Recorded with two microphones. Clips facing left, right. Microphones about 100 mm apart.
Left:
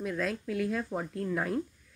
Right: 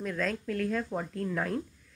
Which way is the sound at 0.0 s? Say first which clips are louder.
Even; 5° left (ahead or behind).